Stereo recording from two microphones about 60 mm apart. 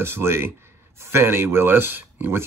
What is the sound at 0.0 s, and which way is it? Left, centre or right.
Speech, right.